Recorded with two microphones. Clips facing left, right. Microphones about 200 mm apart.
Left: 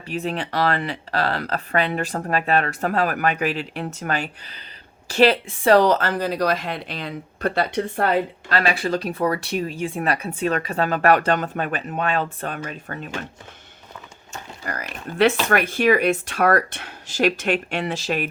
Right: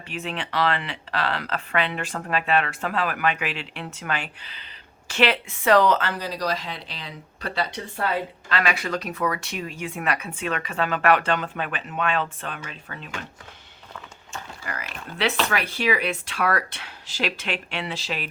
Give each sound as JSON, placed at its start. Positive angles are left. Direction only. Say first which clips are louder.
{"t": 0.1, "sound": "speech", "louder": "left 5 dB", "side_deg": 40}
{"t": 8.4, "sound": "speech", "louder": "left 1 dB", "side_deg": 35}
{"t": 14.6, "sound": "speech", "louder": "left 7 dB", "side_deg": 40}